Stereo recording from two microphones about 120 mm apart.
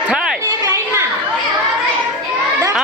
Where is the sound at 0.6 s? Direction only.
25° right (ahead or behind).